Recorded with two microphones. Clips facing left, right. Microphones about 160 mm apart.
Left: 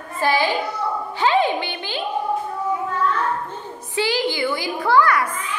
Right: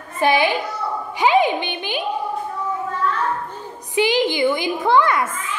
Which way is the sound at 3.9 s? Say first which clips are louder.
Right 4 dB; 20° right (ahead or behind).